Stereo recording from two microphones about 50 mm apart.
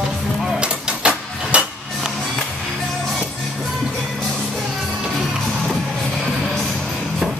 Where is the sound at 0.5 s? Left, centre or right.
Right.